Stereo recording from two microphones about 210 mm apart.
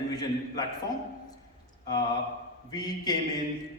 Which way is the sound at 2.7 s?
20° left (ahead or behind).